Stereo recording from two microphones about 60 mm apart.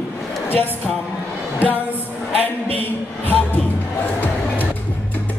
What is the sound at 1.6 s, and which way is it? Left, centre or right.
Music, left.